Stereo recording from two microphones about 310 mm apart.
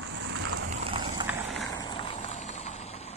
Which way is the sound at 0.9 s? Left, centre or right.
Centre.